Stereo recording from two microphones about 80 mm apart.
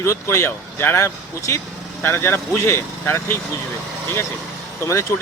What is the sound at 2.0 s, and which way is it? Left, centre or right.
Speech, left.